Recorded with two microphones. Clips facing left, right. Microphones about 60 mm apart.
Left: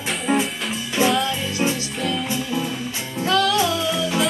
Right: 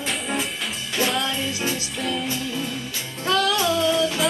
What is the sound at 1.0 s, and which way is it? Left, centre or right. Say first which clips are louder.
Music: left 5 dB; centre.